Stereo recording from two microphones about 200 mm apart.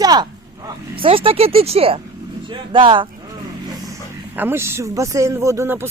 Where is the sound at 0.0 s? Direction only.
20° right (ahead or behind).